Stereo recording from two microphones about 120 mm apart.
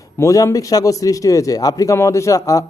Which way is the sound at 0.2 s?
25° left (ahead or behind).